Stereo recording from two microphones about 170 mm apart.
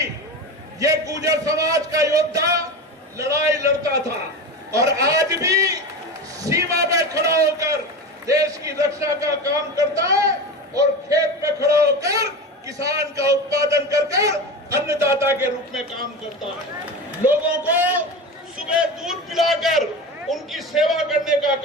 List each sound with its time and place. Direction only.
0.8 s a man's voice: 20° right (ahead or behind)
4.7 s a man's voice: 20° right (ahead or behind)
6.4 s a sound: 20° right (ahead or behind)
8.3 s a man's voice: 20° right (ahead or behind)
17.2 s a man's voice: 10° right (ahead or behind)